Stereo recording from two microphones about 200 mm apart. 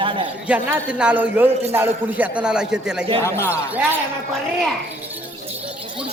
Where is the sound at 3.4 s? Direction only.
10° right (ahead or behind).